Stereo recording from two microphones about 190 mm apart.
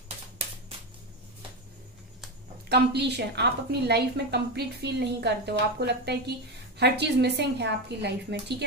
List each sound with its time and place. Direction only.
2.7 s a woman's voice: 60° right (ahead or behind)